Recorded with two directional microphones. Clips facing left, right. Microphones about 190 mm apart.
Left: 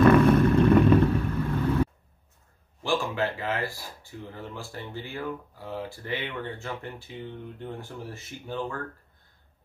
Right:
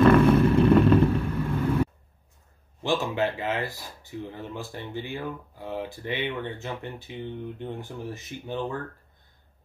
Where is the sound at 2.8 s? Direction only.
20° right (ahead or behind).